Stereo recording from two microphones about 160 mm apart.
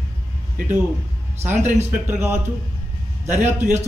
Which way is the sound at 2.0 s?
15° right (ahead or behind).